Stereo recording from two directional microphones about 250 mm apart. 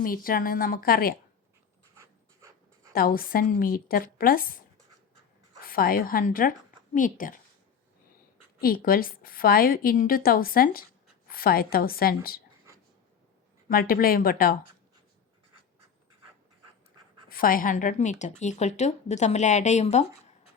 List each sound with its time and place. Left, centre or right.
0.0 s a woman's voice: left
2.0 s writing: centre
2.9 s a woman's voice: left
5.6 s a woman's voice: left
8.6 s a woman's voice: left
13.7 s a woman's voice: left
17.2 s a woman's voice: left